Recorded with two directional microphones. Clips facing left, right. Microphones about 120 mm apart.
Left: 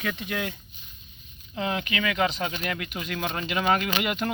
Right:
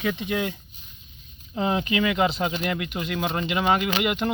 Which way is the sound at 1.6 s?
30° right (ahead or behind).